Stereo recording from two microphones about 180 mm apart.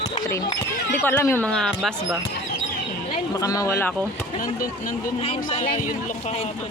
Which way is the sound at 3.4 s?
20° left (ahead or behind).